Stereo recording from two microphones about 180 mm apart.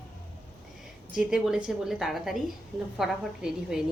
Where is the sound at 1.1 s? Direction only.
5° right (ahead or behind).